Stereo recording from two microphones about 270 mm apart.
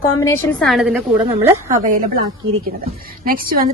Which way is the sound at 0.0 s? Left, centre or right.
Centre.